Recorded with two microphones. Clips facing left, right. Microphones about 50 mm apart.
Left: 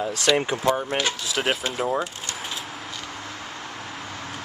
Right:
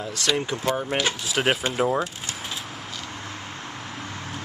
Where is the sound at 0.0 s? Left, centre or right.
Centre.